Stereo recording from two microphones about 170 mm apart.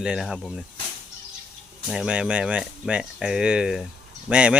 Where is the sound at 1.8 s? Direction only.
5° right (ahead or behind).